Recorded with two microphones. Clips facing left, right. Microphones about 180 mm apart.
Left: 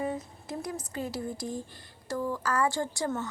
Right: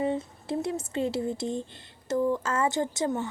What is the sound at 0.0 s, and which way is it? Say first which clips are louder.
Speech: right 5 dB; 25° right (ahead or behind).